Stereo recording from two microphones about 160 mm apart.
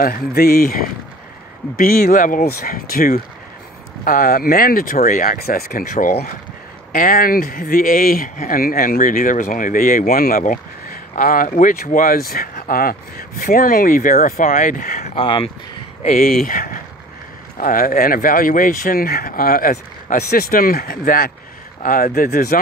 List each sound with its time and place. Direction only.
0.0 s speech: 70° left (ahead or behind)